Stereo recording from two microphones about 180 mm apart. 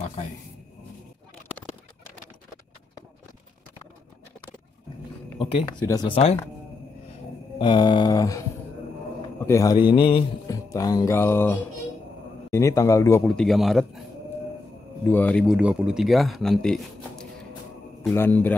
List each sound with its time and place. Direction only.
5.4 s speech: 30° left (ahead or behind)
7.5 s speech: 25° left (ahead or behind)
9.5 s music: 15° left (ahead or behind)
9.9 s speech: 30° left (ahead or behind)
10.5 s music: 20° left (ahead or behind)
13.2 s a man's voice: 5° left (ahead or behind)
15.0 s speech: 10° left (ahead or behind)
18.1 s music: 10° left (ahead or behind)